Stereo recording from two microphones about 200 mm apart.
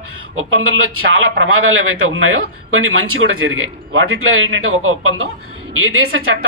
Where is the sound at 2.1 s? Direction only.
90° right.